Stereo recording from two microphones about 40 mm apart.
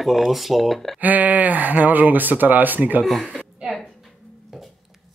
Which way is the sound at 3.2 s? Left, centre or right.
Centre.